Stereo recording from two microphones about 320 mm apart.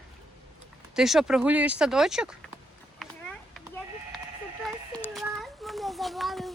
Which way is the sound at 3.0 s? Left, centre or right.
Centre.